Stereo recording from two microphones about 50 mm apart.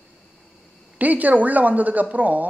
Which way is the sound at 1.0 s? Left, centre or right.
Right.